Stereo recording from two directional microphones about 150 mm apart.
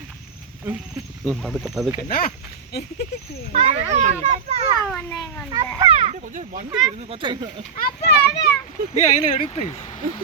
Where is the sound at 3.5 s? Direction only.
45° right (ahead or behind).